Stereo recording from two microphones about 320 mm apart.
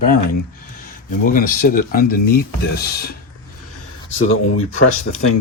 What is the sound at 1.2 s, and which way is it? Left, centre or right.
Speech, left.